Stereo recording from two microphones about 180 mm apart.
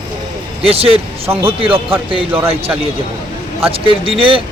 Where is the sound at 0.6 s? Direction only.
30° right (ahead or behind).